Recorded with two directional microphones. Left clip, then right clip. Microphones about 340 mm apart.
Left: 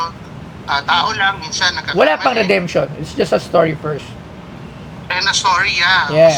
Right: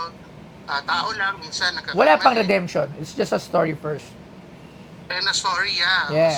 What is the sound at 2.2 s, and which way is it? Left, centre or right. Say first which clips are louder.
Speech: left 3 dB; right.